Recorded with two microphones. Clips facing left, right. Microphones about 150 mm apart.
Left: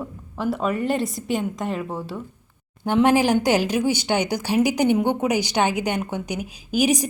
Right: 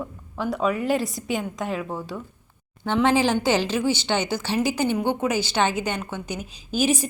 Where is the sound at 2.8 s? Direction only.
15° left (ahead or behind).